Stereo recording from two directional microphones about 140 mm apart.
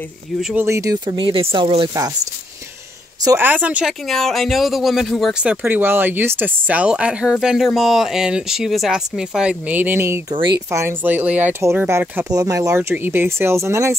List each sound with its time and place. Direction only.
0.6 s speech: 20° right (ahead or behind); by 1.9 s 40° right (ahead or behind)
3.3 s speech: 15° right (ahead or behind)
4.1 s speech: centre (ahead or behind); by 13.9 s 20° right (ahead or behind)